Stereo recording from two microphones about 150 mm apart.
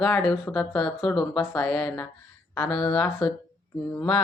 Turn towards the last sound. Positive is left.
turn(degrees=15)  # may be behind; listen again after turning